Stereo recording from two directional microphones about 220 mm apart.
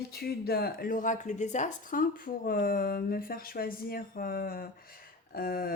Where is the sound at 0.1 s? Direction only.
45° left (ahead or behind).